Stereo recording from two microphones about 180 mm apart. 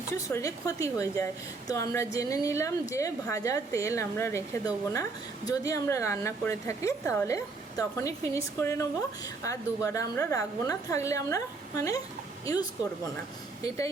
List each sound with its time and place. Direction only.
0.3 s a woman's voice: 15° left (ahead or behind)